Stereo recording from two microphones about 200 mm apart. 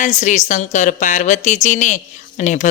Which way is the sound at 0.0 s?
40° left (ahead or behind).